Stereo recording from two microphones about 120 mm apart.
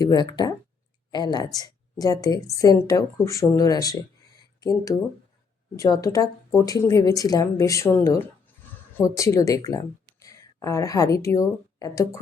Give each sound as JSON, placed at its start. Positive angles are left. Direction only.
{"t": 0.0, "sound": "a woman's voice", "side_deg": 35}